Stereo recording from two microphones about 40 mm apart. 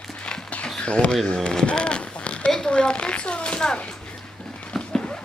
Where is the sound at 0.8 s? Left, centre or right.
Left.